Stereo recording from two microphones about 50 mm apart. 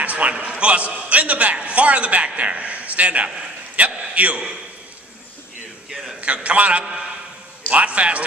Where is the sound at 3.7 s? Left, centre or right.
Right.